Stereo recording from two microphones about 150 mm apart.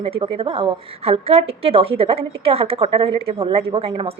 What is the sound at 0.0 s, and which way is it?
A woman's voice, 35° right (ahead or behind).